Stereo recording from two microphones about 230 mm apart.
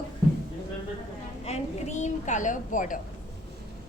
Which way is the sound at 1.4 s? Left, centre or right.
Left.